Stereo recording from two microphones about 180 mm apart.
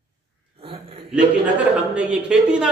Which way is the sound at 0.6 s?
30° right (ahead or behind).